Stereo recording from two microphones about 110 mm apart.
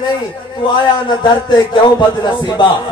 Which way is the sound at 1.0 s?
45° left (ahead or behind).